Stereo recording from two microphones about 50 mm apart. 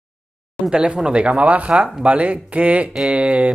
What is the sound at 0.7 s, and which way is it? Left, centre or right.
Speech, centre.